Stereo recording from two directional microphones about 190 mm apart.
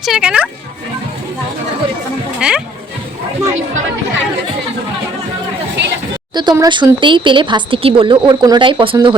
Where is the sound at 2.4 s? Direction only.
5° right (ahead or behind).